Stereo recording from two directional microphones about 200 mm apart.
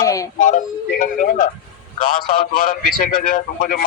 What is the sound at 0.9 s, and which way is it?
A man's voice, 40° left (ahead or behind).